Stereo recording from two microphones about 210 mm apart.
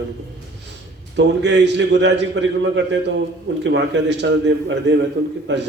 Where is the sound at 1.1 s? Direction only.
55° right (ahead or behind).